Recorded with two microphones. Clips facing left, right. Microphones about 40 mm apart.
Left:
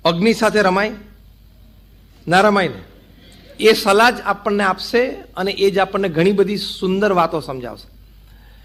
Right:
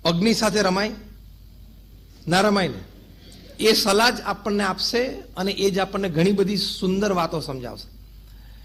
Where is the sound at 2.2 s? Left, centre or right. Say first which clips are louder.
Left 6 dB; left.